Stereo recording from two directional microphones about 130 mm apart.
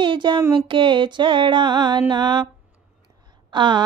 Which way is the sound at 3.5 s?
35° right (ahead or behind).